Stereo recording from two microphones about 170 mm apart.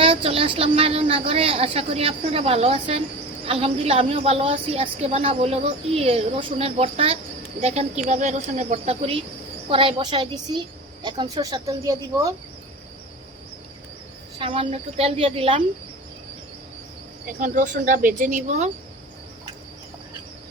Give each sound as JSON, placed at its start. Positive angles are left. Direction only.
{"t": 0.0, "sound": "a woman's voice", "side_deg": -30}
{"t": 14.3, "sound": "a woman's voice", "side_deg": -30}
{"t": 17.4, "sound": "speech", "side_deg": -50}